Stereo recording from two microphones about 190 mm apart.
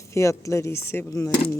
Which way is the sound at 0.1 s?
15° left (ahead or behind).